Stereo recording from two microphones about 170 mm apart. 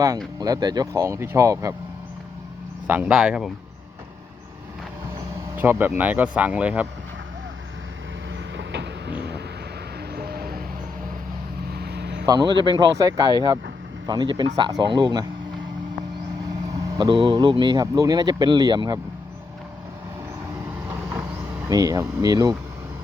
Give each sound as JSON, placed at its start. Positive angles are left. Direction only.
{"t": 0.3, "sound": "speech", "side_deg": -20}
{"t": 2.8, "sound": "speech", "side_deg": -10}
{"t": 5.5, "sound": "speech", "side_deg": -10}
{"t": 8.5, "sound": "train", "side_deg": -90}
{"t": 10.2, "sound": "music", "side_deg": -65}
{"t": 11.7, "sound": "vehicle", "side_deg": -70}
{"t": 12.2, "sound": "speech", "side_deg": -25}
{"t": 17.0, "sound": "speech", "side_deg": -30}
{"t": 20.8, "sound": "vehicle", "side_deg": -15}
{"t": 21.7, "sound": "speech", "side_deg": -20}